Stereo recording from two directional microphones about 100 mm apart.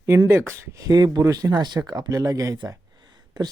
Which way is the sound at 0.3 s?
25° right (ahead or behind).